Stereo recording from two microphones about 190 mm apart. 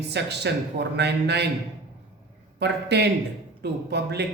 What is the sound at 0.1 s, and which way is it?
A man's voice, 65° right (ahead or behind).